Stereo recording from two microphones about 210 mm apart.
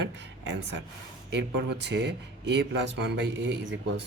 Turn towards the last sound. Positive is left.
turn(degrees=-55)  # may be behind; listen again after turning